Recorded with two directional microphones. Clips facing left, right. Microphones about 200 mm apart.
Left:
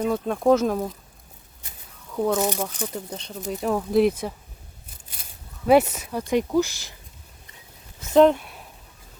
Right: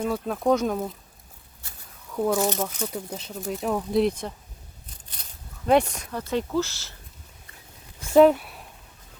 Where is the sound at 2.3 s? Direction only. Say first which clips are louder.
Even; 10° left (ahead or behind).